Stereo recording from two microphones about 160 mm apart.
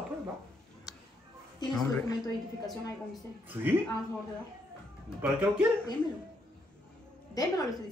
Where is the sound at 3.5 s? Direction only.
10° right (ahead or behind).